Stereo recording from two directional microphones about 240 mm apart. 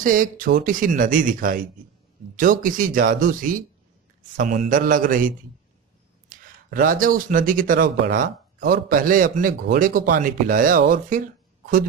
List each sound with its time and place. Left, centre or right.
0.0 s speech: right